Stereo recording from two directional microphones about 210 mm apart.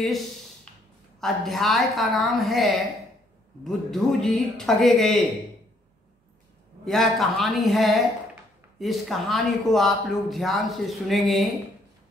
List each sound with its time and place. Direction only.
1.2 s speech: centre (ahead or behind)
6.8 s speech: centre (ahead or behind)